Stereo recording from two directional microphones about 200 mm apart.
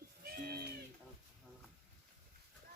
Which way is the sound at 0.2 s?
50° right (ahead or behind).